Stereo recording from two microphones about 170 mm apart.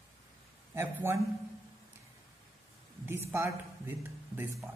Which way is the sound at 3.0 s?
15° right (ahead or behind).